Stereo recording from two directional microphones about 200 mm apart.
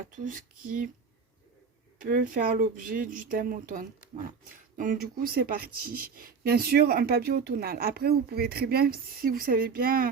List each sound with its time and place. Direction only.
0.3 s speech: 40° right (ahead or behind)
2.0 s speech: 45° right (ahead or behind)